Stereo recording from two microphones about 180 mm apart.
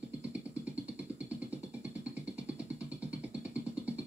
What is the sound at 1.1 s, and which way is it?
Music, 5° right (ahead or behind).